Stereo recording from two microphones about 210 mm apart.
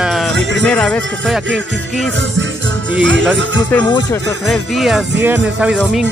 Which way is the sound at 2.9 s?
60° right (ahead or behind).